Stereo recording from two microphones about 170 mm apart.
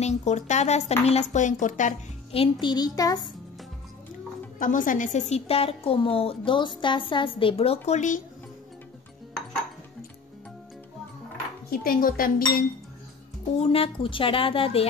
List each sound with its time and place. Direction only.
0.0 s a woman's voice: 40° left (ahead or behind)
2.6 s a child's voice: 25° left (ahead or behind)
4.6 s a woman's voice: 50° left (ahead or behind)
11.7 s speech: 60° left (ahead or behind)
13.6 s a woman's voice: 35° left (ahead or behind)